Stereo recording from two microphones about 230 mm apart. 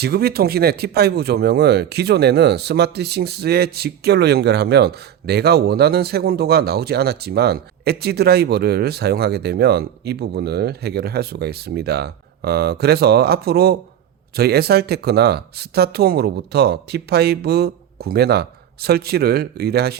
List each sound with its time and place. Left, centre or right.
0.0 s speech: right